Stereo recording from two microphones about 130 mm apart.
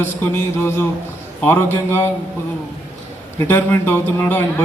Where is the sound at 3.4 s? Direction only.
20° left (ahead or behind).